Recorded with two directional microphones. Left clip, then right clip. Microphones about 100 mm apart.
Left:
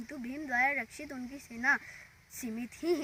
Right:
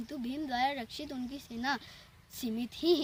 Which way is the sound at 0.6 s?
35° right (ahead or behind).